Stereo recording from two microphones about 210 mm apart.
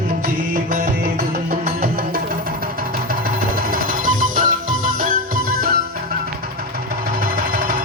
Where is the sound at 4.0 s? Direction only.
40° right (ahead or behind).